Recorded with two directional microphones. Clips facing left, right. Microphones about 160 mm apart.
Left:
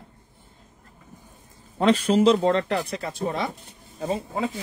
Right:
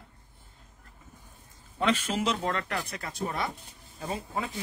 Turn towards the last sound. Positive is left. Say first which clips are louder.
# left 7 dB
turn(degrees=25)  # may be behind; listen again after turning